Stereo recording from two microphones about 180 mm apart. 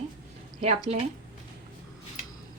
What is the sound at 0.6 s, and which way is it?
Speech, 40° right (ahead or behind).